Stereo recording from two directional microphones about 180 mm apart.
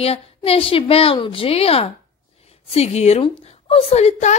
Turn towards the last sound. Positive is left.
turn(degrees=40)  # may be behind; listen again after turning